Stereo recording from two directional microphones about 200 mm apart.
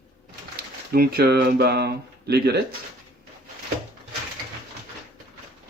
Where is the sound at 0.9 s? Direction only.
50° right (ahead or behind).